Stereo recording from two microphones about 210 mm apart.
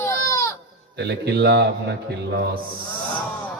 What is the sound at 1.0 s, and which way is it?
Speech, 55° right (ahead or behind).